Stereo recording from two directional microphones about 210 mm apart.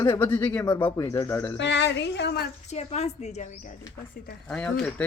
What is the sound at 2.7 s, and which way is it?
Speech, 30° left (ahead or behind).